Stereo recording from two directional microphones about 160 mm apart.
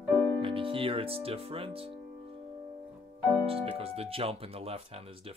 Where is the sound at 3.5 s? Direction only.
35° right (ahead or behind).